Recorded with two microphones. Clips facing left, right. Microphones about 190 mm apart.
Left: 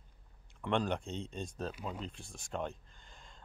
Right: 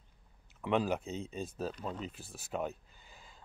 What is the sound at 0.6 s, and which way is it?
Speech, 5° right (ahead or behind).